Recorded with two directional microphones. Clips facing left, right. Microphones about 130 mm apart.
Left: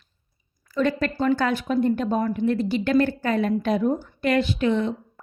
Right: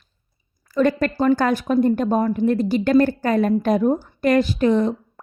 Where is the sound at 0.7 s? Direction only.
45° right (ahead or behind).